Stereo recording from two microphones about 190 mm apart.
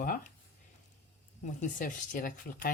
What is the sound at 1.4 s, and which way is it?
Speech, 45° left (ahead or behind).